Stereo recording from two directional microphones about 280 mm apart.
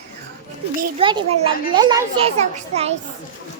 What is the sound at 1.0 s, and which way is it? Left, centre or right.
Speech, centre.